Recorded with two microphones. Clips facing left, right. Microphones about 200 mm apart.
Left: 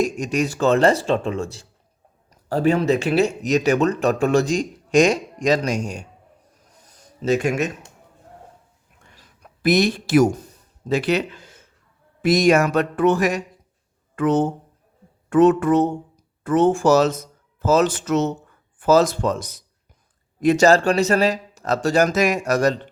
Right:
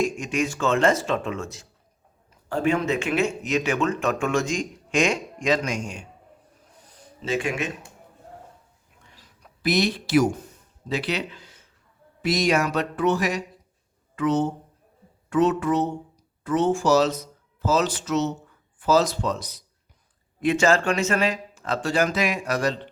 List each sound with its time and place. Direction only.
0.0 s speech: 40° left (ahead or behind)
7.2 s speech: 40° left (ahead or behind)
9.6 s speech: 50° left (ahead or behind)